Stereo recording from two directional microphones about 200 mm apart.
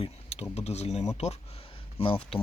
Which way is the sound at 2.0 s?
30° left (ahead or behind).